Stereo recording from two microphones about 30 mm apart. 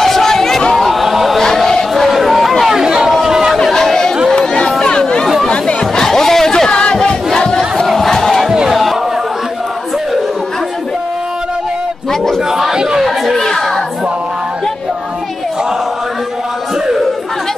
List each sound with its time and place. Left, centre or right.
0.0 s a sound: centre
0.7 s a sound: centre
1.4 s a sound: centre
2.0 s chatter: centre
2.7 s chatter: right
3.7 s chatter: centre
4.4 s chatter: left
5.9 s chatter: centre
6.7 s battle cry: left
7.3 s battle cry: left
7.7 s crowd: centre
8.6 s a sound: centre
13.0 s chatter: centre